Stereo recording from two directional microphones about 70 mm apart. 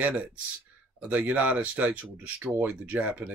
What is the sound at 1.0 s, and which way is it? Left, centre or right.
Speech, centre.